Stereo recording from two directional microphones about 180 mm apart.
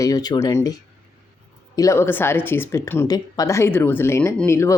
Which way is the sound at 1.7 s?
15° left (ahead or behind).